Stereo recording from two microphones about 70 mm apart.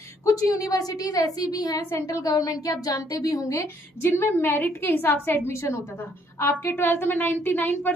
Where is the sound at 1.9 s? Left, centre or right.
Left.